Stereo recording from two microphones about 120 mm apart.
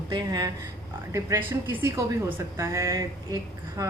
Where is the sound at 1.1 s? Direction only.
20° right (ahead or behind).